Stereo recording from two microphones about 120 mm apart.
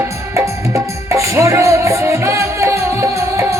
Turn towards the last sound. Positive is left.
turn(degrees=-25)  # may be behind; listen again after turning